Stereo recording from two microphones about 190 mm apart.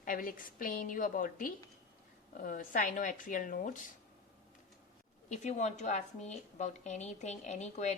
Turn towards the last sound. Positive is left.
turn(degrees=35)  # may be behind; listen again after turning